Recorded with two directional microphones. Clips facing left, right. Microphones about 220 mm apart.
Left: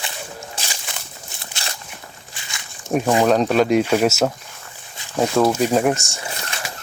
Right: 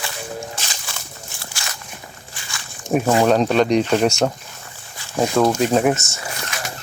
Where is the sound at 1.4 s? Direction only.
25° left (ahead or behind).